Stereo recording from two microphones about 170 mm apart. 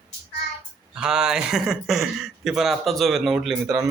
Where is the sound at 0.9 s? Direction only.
5° right (ahead or behind).